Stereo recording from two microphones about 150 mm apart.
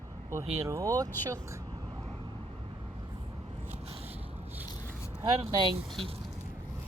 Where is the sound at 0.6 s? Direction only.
20° right (ahead or behind).